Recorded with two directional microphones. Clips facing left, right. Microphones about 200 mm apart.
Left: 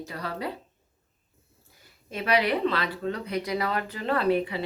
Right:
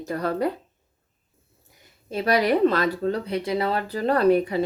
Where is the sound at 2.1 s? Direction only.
40° right (ahead or behind).